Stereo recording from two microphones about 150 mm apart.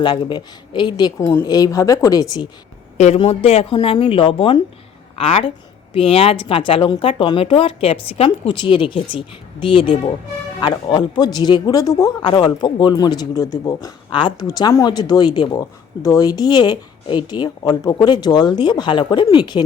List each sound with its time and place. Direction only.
0.0 s speech: 30° left (ahead or behind)
1.2 s a woman's voice: 15° left (ahead or behind)
1.5 s speech: 25° left (ahead or behind)
3.2 s speech: 40° left (ahead or behind)